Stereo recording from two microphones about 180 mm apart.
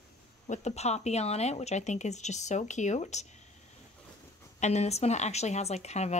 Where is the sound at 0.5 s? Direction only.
40° left (ahead or behind).